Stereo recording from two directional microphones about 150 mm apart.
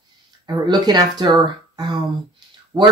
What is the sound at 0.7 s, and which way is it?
Speech, 25° right (ahead or behind).